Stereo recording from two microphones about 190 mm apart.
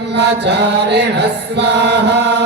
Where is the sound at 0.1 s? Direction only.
65° right (ahead or behind).